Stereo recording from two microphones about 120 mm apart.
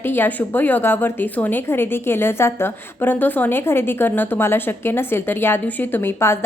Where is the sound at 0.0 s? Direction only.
15° left (ahead or behind).